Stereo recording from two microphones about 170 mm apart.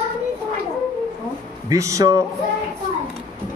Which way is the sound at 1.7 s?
20° right (ahead or behind).